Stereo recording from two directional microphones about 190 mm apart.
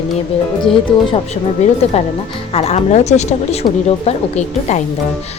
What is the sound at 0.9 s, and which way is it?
Speech, 25° left (ahead or behind).